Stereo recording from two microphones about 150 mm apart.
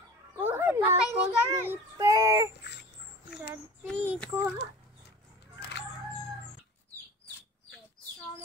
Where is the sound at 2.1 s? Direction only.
25° right (ahead or behind).